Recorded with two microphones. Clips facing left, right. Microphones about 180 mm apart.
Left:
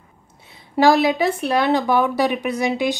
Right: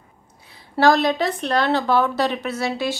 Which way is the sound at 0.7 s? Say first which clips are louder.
Left 2 dB; 10° left (ahead or behind).